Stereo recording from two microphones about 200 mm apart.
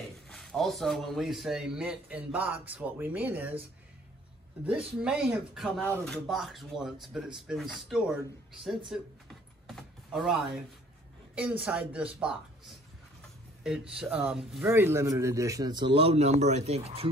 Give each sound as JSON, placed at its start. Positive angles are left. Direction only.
{"t": 0.3, "sound": "speech", "side_deg": 0}
{"t": 4.6, "sound": "speech", "side_deg": -5}
{"t": 8.6, "sound": "typing", "side_deg": 0}
{"t": 11.3, "sound": "a man's voice", "side_deg": -5}